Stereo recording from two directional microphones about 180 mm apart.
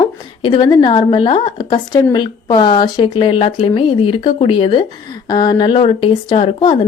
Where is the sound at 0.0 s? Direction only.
25° left (ahead or behind).